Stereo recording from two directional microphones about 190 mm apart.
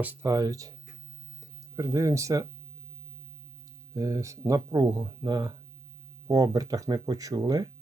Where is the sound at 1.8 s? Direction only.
15° right (ahead or behind).